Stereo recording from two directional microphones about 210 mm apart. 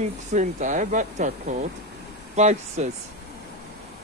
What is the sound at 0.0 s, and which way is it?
Speech, 35° right (ahead or behind).